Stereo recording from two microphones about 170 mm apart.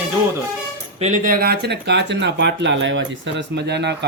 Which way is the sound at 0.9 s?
45° right (ahead or behind).